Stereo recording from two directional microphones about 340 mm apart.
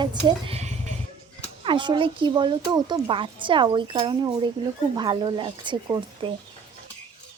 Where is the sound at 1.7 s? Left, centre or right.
Centre.